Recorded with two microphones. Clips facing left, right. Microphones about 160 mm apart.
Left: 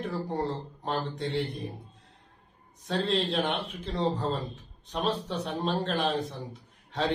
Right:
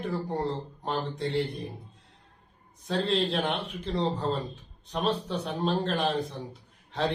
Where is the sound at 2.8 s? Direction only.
Centre (ahead or behind).